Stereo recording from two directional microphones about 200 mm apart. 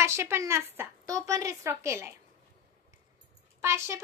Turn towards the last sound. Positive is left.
turn(degrees=-15)  # may be behind; listen again after turning